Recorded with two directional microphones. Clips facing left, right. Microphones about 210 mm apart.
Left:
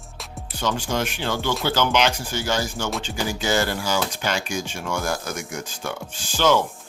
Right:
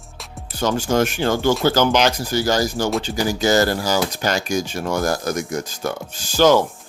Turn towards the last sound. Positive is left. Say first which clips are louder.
# right 5 dB
turn(degrees=-40)  # may be behind; listen again after turning